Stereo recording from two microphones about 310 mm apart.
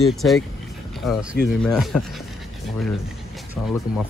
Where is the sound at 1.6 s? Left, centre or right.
Centre.